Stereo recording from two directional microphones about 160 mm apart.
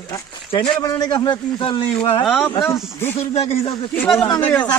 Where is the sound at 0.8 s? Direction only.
25° left (ahead or behind).